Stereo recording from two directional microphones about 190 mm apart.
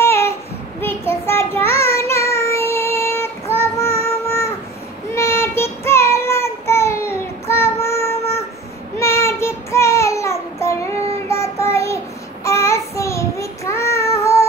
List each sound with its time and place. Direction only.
0.0 s child singing: 15° left (ahead or behind)